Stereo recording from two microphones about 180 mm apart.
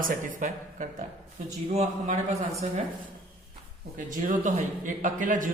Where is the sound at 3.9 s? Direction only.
45° right (ahead or behind).